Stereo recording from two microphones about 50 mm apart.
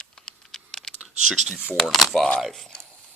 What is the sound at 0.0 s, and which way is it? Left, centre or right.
Computer keyboard, centre.